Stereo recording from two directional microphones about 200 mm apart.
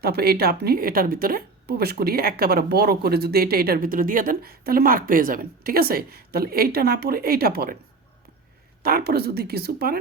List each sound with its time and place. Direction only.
0.0 s speech: 50° right (ahead or behind)
8.8 s speech: 50° right (ahead or behind)